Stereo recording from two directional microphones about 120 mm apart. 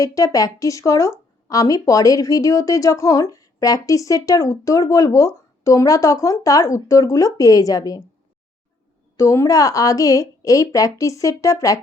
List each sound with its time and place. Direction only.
0.0 s speech: 30° left (ahead or behind)
9.1 s speech: 25° left (ahead or behind)